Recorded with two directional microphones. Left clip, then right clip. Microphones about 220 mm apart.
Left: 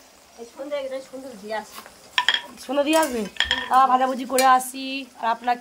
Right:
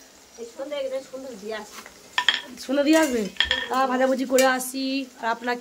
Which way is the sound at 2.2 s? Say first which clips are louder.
Left 1 dB; 25° left (ahead or behind).